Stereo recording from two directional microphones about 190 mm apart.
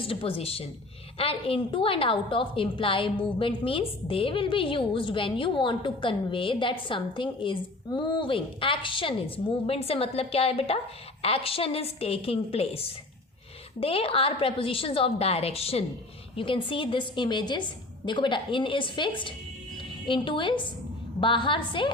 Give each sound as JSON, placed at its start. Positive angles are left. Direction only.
{"t": 0.0, "sound": "a woman's voice", "side_deg": 30}